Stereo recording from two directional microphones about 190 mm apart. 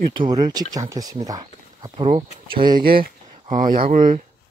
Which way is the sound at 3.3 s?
40° right (ahead or behind).